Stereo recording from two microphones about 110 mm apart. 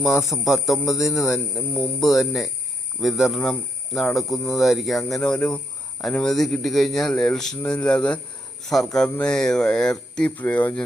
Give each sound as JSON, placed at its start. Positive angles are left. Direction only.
{"t": 0.2, "sound": "speech", "side_deg": 0}